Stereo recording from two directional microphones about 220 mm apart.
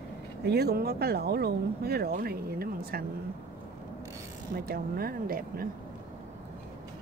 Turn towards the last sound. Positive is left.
turn(degrees=-40)  # may be behind; listen again after turning